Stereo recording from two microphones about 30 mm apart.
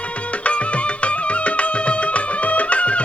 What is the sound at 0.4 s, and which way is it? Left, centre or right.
Music, left.